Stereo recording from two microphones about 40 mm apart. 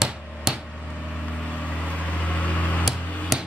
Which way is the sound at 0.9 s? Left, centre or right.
Left.